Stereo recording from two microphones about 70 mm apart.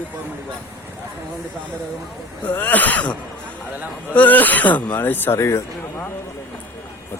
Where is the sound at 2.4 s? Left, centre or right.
Left.